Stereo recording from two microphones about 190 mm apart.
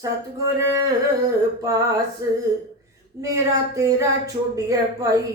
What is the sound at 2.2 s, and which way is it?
Speech, 20° right (ahead or behind).